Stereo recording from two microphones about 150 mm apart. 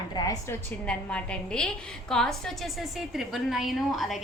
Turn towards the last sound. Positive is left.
turn(degrees=0)  # may be behind; listen again after turning